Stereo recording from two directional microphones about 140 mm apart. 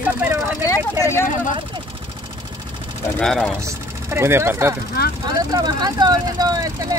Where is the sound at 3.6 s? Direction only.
20° right (ahead or behind).